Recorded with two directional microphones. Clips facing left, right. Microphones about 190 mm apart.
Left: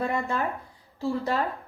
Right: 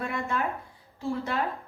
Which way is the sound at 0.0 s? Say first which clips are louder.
Left 3 dB; 35° left (ahead or behind).